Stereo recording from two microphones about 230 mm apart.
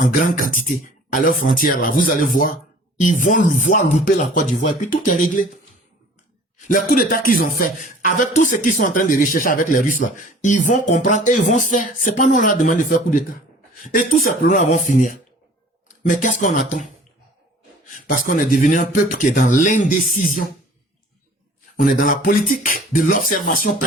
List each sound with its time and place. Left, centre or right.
0.1 s speech: left
6.7 s speech: left
17.8 s speech: left
21.8 s speech: left